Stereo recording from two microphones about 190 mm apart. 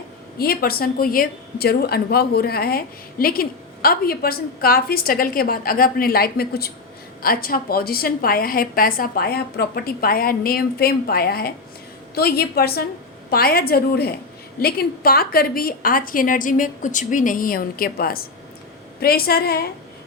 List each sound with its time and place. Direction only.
0.3 s a woman's voice: 50° left (ahead or behind)